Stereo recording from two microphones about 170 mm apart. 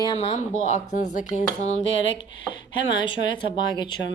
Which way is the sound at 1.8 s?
90° left.